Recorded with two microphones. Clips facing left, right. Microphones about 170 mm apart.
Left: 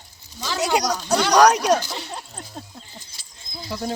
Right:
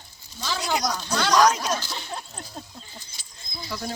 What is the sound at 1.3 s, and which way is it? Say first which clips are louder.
Speech: left 5 dB; 70° left (ahead or behind).